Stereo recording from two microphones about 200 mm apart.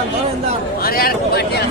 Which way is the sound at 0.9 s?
50° left (ahead or behind).